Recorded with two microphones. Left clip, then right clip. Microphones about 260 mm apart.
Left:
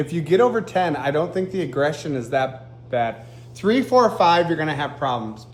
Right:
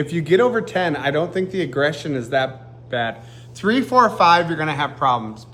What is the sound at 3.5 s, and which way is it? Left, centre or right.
Speech, centre.